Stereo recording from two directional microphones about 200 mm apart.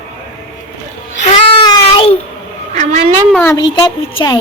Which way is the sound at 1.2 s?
35° left (ahead or behind).